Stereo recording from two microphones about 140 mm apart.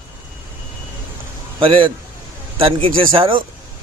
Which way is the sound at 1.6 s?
40° right (ahead or behind).